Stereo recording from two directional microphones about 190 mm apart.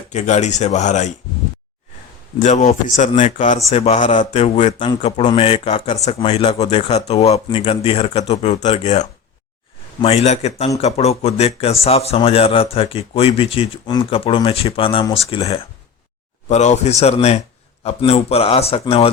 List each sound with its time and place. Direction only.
0.1 s speech: 40° left (ahead or behind)
2.4 s speech: 40° left (ahead or behind)